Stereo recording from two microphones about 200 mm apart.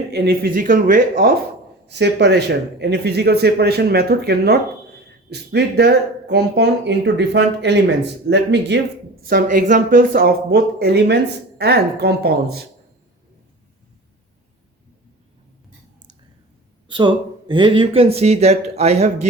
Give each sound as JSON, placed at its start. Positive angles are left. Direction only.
{"t": 0.1, "sound": "speech", "side_deg": -50}
{"t": 1.9, "sound": "speech", "side_deg": -60}
{"t": 9.2, "sound": "speech", "side_deg": -45}
{"t": 17.5, "sound": "speech", "side_deg": -25}